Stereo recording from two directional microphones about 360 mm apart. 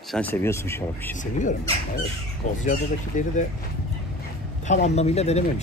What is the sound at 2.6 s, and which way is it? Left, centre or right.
Speech, left.